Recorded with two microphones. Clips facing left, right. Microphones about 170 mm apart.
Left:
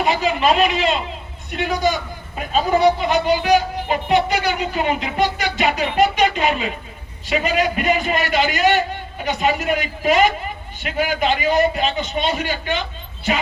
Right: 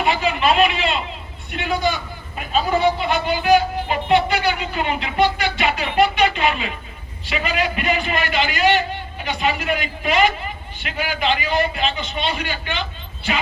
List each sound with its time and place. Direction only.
0.0 s a man's voice: 40° left (ahead or behind)